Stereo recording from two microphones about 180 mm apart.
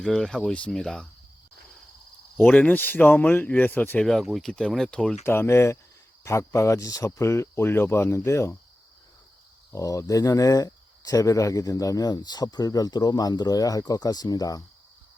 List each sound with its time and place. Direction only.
0.0 s speech: 5° left (ahead or behind)
2.4 s speech: 10° left (ahead or behind)
9.7 s speech: 15° left (ahead or behind)